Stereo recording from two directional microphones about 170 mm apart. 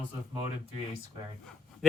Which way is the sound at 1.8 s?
Centre (ahead or behind).